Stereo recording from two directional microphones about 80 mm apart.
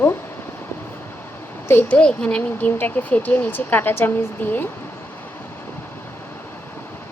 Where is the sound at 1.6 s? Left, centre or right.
Left.